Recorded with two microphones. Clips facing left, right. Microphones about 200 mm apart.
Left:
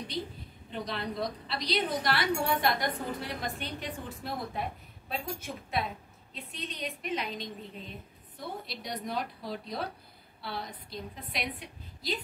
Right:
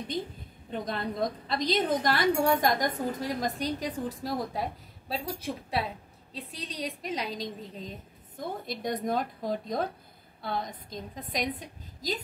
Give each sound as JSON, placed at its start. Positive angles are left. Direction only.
{"t": 0.7, "sound": "a woman's voice", "side_deg": -50}
{"t": 8.4, "sound": "a woman's voice", "side_deg": -50}